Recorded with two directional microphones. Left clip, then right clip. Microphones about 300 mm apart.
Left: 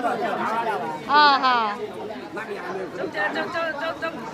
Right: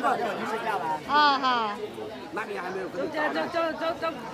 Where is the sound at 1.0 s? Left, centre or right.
Centre.